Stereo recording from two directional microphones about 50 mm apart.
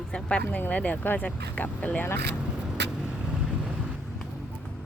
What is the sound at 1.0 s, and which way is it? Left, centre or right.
Speech, left.